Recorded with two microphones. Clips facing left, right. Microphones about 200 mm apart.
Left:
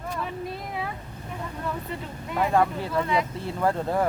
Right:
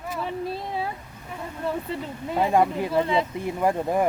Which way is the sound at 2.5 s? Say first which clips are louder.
Right 2 dB; 15° right (ahead or behind).